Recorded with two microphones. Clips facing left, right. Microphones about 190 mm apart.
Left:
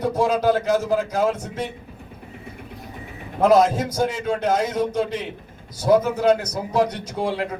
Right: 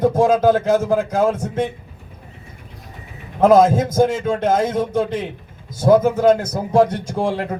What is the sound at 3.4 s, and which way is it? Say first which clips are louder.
A man's voice: right 4 dB; 50° right (ahead or behind).